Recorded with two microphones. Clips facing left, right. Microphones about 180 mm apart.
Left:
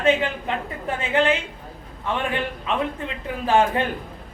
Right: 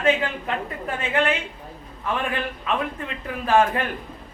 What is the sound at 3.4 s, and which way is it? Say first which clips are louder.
Speech: even; 25° left (ahead or behind).